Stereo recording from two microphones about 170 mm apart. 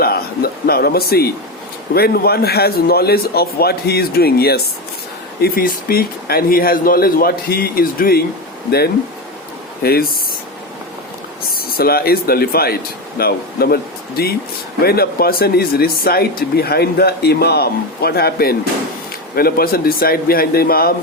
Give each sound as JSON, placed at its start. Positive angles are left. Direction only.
{"t": 0.0, "sound": "a sound", "side_deg": 65}
{"t": 1.9, "sound": "a man's voice", "side_deg": 65}
{"t": 9.8, "sound": "speech", "side_deg": 65}
{"t": 11.8, "sound": "speech", "side_deg": 60}
{"t": 14.8, "sound": "speech", "side_deg": 65}